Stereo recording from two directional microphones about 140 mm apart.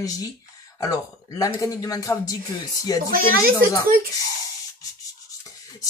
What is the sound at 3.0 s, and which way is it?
Speech, 90° right.